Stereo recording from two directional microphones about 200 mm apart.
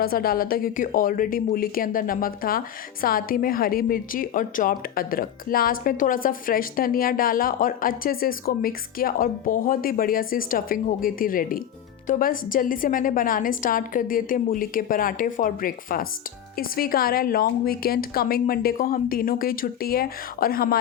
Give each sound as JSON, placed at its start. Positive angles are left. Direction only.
{"t": 0.0, "sound": "speech", "side_deg": 50}